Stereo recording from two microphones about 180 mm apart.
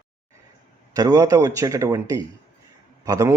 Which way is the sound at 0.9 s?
20° right (ahead or behind).